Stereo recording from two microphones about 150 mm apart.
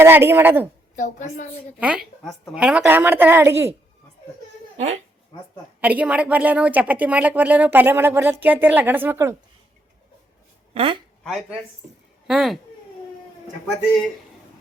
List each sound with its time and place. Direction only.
0.0 s a woman's voice: 15° right (ahead or behind)
0.9 s a woman's voice: 55° left (ahead or behind)
1.8 s a woman's voice: 5° right (ahead or behind)
5.8 s a woman's voice: 10° right (ahead or behind)
10.8 s speech: 35° right (ahead or behind)
11.2 s a child's voice: 5° left (ahead or behind)